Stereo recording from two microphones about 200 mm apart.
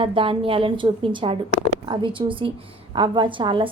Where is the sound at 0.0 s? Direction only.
25° right (ahead or behind).